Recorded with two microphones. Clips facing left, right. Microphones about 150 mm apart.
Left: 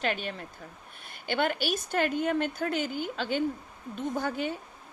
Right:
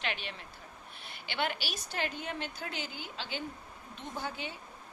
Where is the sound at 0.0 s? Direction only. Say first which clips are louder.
Left 7 dB; 45° left (ahead or behind).